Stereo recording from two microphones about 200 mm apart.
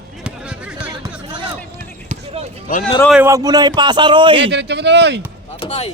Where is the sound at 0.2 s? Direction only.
5° right (ahead or behind).